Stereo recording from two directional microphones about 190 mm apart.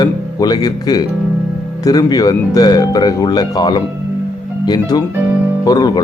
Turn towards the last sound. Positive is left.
turn(degrees=20)  # may be behind; listen again after turning